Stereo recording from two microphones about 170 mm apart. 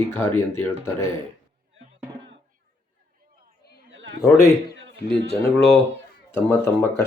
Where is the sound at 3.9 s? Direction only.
90° right.